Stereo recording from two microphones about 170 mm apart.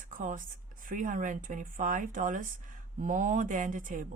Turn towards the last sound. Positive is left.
turn(degrees=-50)  # may be behind; listen again after turning